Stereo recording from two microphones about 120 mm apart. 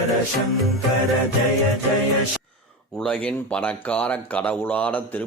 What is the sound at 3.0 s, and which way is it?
Speech, 10° left (ahead or behind).